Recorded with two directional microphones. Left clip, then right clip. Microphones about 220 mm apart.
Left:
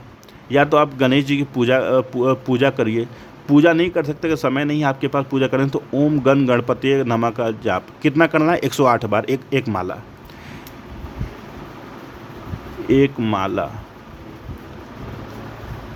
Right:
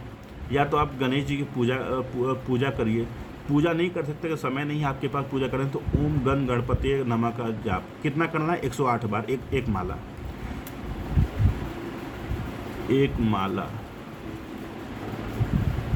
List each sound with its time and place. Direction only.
0.5 s a man's voice: 50° left (ahead or behind)
12.9 s a man's voice: 45° left (ahead or behind)